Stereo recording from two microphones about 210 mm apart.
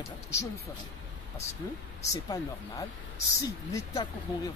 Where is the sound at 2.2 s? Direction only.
15° left (ahead or behind).